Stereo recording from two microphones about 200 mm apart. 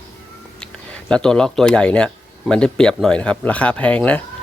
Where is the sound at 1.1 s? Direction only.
5° left (ahead or behind).